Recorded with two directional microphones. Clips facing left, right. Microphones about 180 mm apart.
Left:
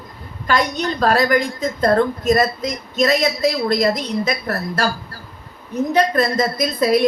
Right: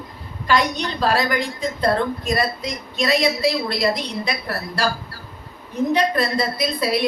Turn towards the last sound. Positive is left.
turn(degrees=45)  # may be behind; listen again after turning